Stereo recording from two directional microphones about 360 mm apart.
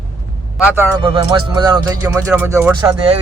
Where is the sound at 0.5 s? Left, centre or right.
Centre.